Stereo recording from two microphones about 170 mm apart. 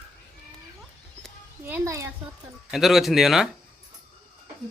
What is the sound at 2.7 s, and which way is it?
Speech, centre (ahead or behind).